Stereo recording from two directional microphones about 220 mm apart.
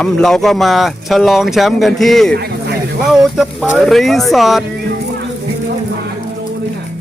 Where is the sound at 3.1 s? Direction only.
Centre (ahead or behind).